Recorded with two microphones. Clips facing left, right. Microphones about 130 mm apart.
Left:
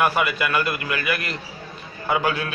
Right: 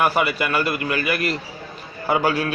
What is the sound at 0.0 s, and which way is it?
A man's voice, 30° right (ahead or behind).